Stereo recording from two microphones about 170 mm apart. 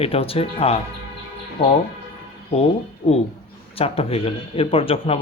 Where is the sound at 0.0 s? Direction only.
35° left (ahead or behind).